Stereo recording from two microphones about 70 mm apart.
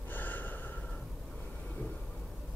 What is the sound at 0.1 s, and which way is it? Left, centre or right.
Gasp, left.